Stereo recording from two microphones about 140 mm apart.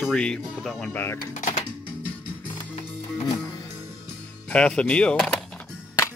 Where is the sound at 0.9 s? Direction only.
15° left (ahead or behind).